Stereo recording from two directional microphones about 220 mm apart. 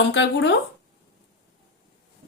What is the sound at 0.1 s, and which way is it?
Speech, 55° left (ahead or behind).